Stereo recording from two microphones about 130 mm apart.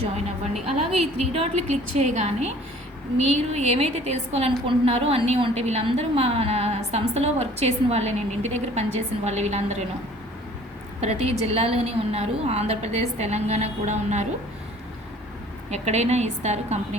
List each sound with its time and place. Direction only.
0.8 s a woman's voice: 50° right (ahead or behind)
11.0 s a woman's voice: 55° right (ahead or behind)
15.7 s a woman's voice: 60° right (ahead or behind)